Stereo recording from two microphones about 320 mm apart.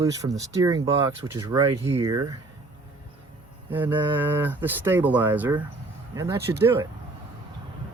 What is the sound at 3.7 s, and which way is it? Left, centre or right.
Speech, centre.